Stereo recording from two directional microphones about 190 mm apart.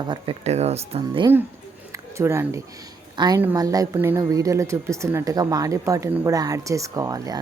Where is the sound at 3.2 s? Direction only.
20° right (ahead or behind).